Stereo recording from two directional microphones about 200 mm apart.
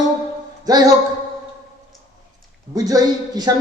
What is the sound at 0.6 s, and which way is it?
Music, 20° right (ahead or behind).